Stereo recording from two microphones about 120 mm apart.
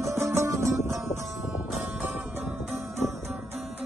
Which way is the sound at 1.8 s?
10° right (ahead or behind).